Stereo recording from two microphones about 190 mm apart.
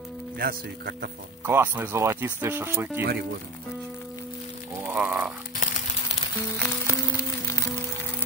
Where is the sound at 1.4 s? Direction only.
10° right (ahead or behind).